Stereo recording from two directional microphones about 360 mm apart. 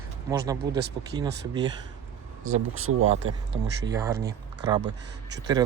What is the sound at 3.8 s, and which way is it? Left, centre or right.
Speech, centre.